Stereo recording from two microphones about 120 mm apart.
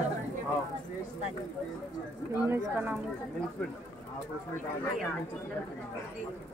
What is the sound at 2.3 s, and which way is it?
Speech, 20° right (ahead or behind).